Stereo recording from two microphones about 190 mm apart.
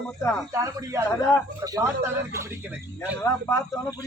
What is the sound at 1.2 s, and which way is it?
Speech, 15° left (ahead or behind).